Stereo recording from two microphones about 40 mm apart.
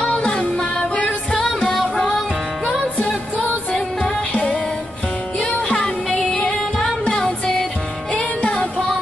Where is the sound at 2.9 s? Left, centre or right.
Left.